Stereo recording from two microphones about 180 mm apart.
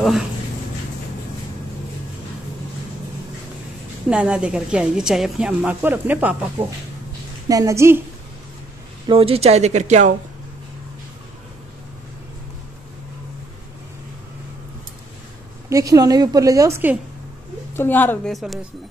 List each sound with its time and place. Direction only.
4.1 s a woman's voice: 5° right (ahead or behind)
9.0 s speech: 30° right (ahead or behind)
15.7 s a woman's voice: 20° right (ahead or behind)
17.7 s a woman's voice: 10° left (ahead or behind)